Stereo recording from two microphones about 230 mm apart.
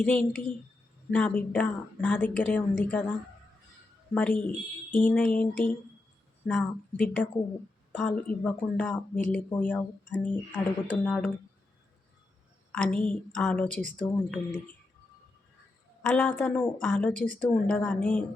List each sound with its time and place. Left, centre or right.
0.0 s a woman's voice: centre
4.1 s speech: centre
12.7 s a woman's voice: centre
16.0 s a woman's voice: centre